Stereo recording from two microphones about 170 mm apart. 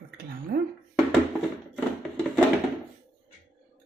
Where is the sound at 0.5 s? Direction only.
70° right (ahead or behind).